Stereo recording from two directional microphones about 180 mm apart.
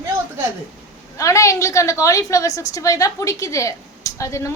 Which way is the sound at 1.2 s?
15° left (ahead or behind).